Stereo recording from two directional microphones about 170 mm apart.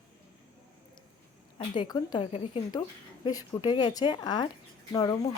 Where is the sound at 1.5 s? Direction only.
30° left (ahead or behind).